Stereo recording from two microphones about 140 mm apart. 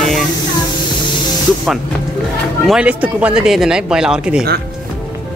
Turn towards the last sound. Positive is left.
turn(degrees=-5)  # may be behind; listen again after turning